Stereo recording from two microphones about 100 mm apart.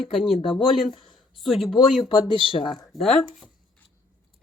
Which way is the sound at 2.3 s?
60° left (ahead or behind).